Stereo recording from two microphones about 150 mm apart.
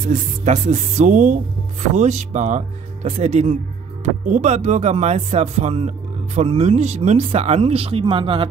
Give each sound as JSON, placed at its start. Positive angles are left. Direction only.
{"t": 0.0, "sound": "speech", "side_deg": -50}